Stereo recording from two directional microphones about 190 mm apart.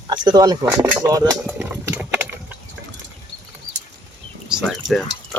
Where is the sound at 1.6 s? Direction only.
10° right (ahead or behind).